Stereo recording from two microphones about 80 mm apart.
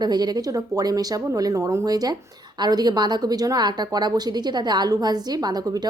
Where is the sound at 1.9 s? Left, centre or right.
Right.